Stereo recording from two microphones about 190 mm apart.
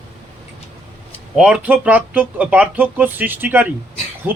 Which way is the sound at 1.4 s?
5° right (ahead or behind).